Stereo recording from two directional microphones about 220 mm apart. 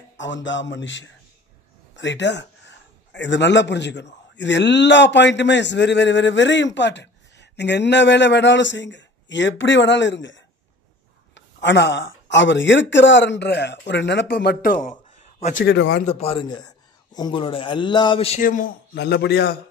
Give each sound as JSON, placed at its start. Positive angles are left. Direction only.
{"t": 0.2, "sound": "a man's voice", "side_deg": 55}
{"t": 15.6, "sound": "a man's voice", "side_deg": 50}
{"t": 16.1, "sound": "a man's voice", "side_deg": 30}
{"t": 18.4, "sound": "a man's voice", "side_deg": 40}